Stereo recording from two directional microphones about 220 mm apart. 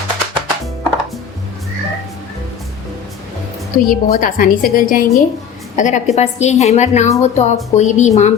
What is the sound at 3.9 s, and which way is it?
Speech, 40° left (ahead or behind).